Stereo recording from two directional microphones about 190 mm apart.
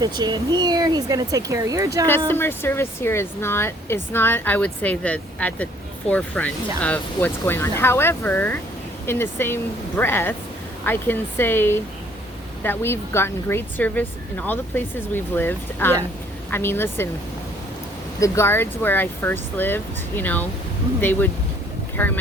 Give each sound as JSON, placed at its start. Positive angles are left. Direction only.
{"t": 0.2, "sound": "speech", "side_deg": -20}
{"t": 2.0, "sound": "speech", "side_deg": 10}
{"t": 18.2, "sound": "speech", "side_deg": 15}